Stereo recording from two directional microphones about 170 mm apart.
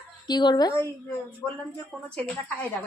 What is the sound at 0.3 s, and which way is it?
Speech, 25° left (ahead or behind).